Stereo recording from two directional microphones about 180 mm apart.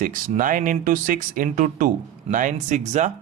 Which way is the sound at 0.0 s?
50° right (ahead or behind).